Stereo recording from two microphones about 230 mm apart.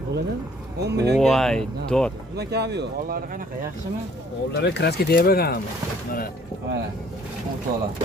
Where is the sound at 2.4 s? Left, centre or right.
Right.